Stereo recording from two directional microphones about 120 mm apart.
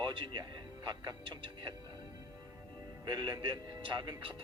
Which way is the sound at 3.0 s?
35° right (ahead or behind).